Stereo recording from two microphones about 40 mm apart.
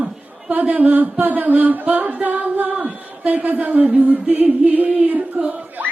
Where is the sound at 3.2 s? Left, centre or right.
Right.